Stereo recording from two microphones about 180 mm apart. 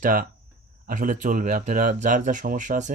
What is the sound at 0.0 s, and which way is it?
Speech, 45° right (ahead or behind).